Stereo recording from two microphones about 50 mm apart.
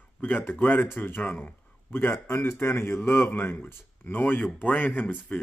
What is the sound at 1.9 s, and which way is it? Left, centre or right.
A man's voice, left.